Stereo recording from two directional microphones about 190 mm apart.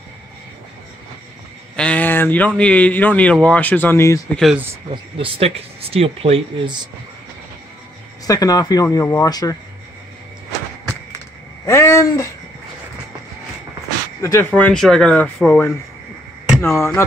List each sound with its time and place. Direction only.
1.8 s speech: 5° left (ahead or behind)
4.4 s speech: centre (ahead or behind)
4.9 s speech: 30° right (ahead or behind)
8.3 s speech: 20° left (ahead or behind)
11.6 s speech: 15° left (ahead or behind)
14.2 s speech: 15° left (ahead or behind)